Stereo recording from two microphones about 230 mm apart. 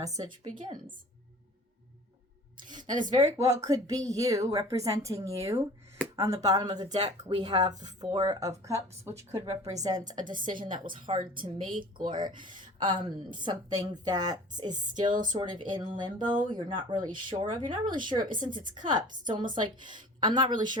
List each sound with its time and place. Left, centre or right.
0.0 s speech: centre
2.6 s a sound: centre
3.3 s a woman's voice: centre